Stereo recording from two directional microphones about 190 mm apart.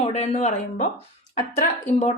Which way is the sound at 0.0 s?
35° left (ahead or behind).